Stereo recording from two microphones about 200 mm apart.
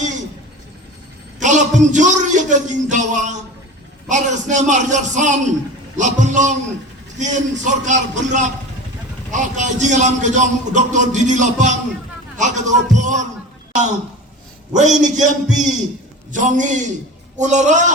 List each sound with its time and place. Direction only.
1.4 s a man's voice: 35° right (ahead or behind)
14.7 s a man's voice: 35° right (ahead or behind)